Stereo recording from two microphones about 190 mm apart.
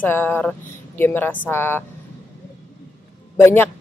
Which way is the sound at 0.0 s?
10° left (ahead or behind).